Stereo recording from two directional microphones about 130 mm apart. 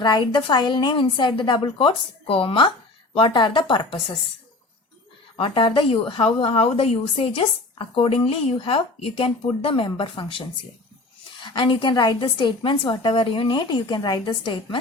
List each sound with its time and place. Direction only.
0.0 s a woman's voice: 35° left (ahead or behind)
5.4 s a woman's voice: 40° left (ahead or behind)